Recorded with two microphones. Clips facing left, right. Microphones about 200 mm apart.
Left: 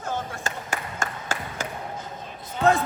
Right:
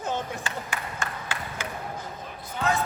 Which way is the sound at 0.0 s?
20° right (ahead or behind).